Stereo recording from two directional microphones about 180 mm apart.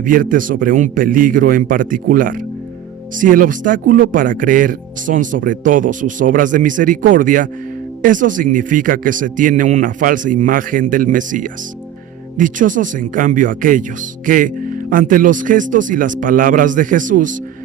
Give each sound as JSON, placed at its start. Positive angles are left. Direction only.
{"t": 0.0, "sound": "speech", "side_deg": -50}